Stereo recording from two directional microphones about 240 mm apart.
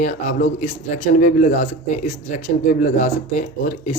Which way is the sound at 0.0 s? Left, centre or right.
Left.